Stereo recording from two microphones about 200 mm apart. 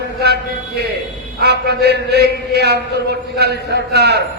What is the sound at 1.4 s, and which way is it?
A man's voice, 55° right (ahead or behind).